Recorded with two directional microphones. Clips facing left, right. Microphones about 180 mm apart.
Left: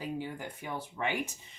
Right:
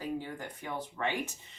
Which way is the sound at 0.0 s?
15° left (ahead or behind).